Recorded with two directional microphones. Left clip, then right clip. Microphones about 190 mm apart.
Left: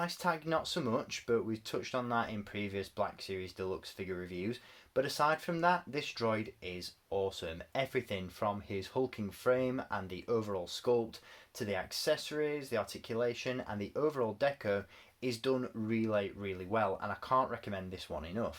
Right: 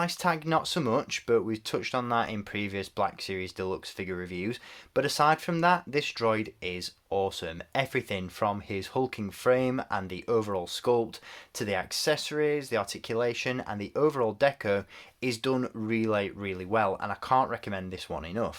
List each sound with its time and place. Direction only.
0.0 s speech: 40° right (ahead or behind)